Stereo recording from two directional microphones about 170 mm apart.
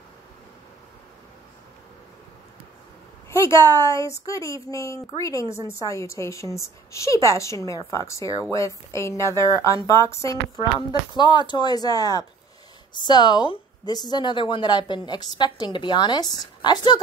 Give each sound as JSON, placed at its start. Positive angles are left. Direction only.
{"t": 3.3, "sound": "a woman's voice", "side_deg": 15}